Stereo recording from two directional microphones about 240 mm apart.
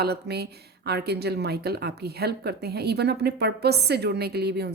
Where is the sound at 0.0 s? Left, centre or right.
Right.